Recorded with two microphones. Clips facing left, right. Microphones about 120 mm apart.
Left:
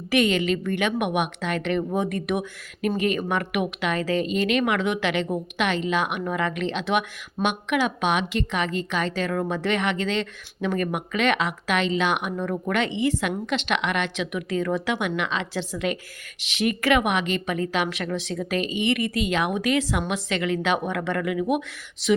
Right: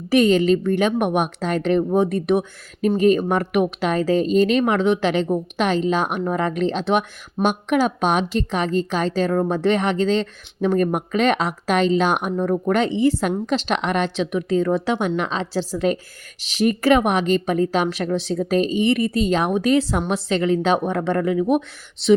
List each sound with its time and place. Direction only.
0.1 s speech: 35° right (ahead or behind)